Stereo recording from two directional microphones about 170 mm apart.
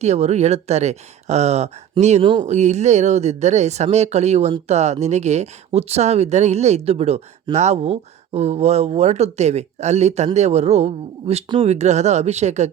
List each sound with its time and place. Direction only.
0.0 s speech: 40° right (ahead or behind)